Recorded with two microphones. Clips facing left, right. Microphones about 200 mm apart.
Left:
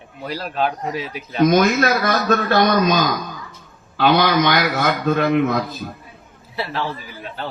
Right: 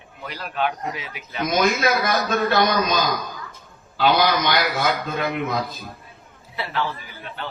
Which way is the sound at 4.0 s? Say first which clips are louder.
Left 3 dB; 55° left (ahead or behind).